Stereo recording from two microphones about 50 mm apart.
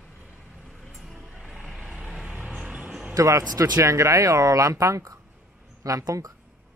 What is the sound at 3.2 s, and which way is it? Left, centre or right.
Speech, right.